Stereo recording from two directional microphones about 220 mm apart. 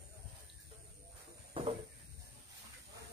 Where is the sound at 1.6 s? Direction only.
25° right (ahead or behind).